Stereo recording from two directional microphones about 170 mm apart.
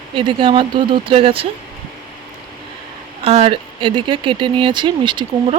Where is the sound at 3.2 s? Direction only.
35° right (ahead or behind).